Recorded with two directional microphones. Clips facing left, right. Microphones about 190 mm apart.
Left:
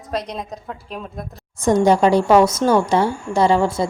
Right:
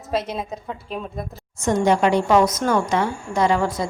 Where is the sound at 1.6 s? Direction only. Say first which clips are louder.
Left 4 dB; 35° left (ahead or behind).